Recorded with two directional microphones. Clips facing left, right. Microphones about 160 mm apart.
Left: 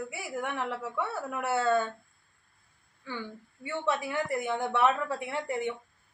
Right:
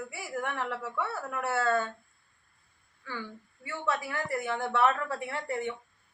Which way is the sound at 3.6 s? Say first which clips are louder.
Left 2 dB; 25° left (ahead or behind).